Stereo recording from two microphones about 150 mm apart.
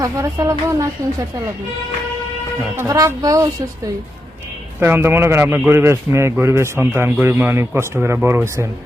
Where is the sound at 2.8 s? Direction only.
20° right (ahead or behind).